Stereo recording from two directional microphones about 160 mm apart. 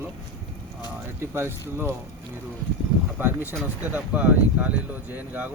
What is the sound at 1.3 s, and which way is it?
Speech, 15° right (ahead or behind).